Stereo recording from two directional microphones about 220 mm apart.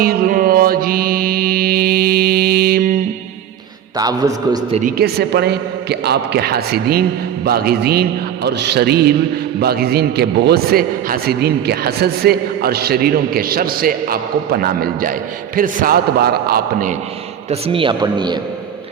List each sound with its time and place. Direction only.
0.0 s music: 45° right (ahead or behind)
3.9 s a man's voice: 15° right (ahead or behind)
4.8 s a man's voice: 40° right (ahead or behind)
17.5 s speech: 25° right (ahead or behind)